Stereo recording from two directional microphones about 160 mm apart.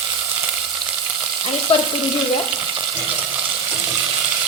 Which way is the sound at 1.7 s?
35° left (ahead or behind).